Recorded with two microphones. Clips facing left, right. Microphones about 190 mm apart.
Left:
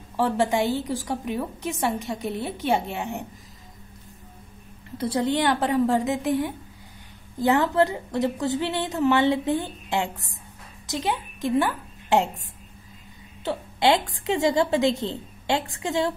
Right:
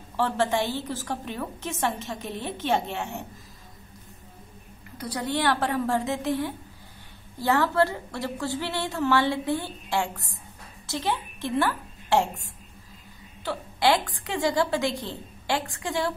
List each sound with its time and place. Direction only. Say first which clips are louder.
0.2 s a woman's voice: left 3 dB; 15° left (ahead or behind)
4.9 s a woman's voice: left 5 dB; 25° left (ahead or behind)